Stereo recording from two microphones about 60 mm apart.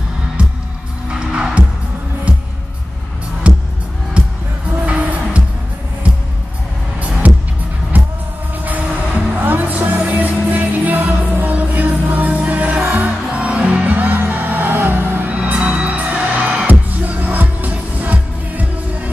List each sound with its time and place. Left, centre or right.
1.3 s music: centre
3.4 s music: right
7.2 s music: right
8.6 s music: right